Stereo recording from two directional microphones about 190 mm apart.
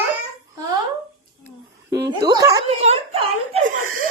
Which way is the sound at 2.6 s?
35° right (ahead or behind).